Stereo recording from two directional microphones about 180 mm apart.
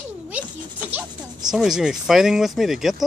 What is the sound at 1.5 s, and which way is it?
Speech, centre (ahead or behind).